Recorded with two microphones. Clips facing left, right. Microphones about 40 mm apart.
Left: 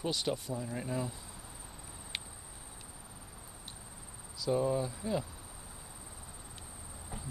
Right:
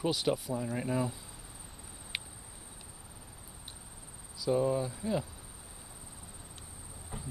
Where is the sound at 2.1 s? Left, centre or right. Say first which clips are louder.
Right 2 dB; centre.